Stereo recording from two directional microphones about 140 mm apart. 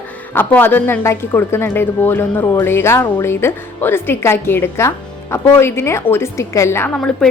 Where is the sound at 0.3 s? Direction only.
15° left (ahead or behind).